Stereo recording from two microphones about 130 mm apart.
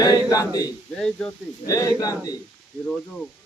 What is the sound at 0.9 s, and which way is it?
Speech, 5° left (ahead or behind).